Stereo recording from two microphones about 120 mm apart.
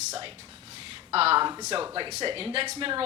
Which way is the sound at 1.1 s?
55° right (ahead or behind).